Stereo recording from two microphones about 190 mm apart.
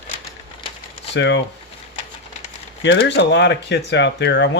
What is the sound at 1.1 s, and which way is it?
Speech, 70° left (ahead or behind).